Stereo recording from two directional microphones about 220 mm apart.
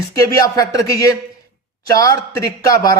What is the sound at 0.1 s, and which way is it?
Speech, 15° left (ahead or behind).